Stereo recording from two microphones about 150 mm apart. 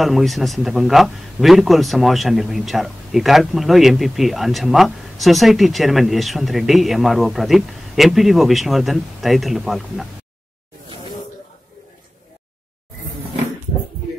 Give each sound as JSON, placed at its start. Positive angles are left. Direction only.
{"t": 0.0, "sound": "a man's voice", "side_deg": 0}